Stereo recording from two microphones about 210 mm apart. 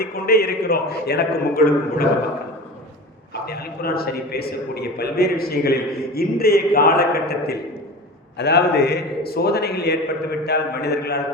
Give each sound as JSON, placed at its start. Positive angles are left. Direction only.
{"t": 0.0, "sound": "a man's voice", "side_deg": 45}
{"t": 3.4, "sound": "a man's voice", "side_deg": 50}